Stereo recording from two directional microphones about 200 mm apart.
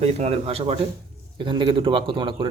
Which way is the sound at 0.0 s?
30° right (ahead or behind).